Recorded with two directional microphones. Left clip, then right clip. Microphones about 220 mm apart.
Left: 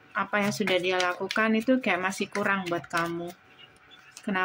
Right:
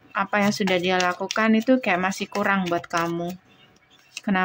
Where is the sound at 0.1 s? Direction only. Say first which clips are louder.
Right 5 dB; 15° right (ahead or behind).